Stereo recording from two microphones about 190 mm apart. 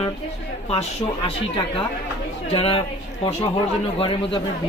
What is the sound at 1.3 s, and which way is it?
A woman's voice, 25° left (ahead or behind).